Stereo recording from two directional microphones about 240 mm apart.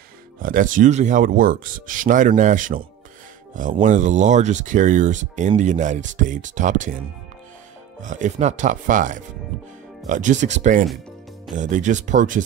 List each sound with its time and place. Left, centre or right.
0.4 s speech: right
3.8 s speech: right
8.0 s speech: right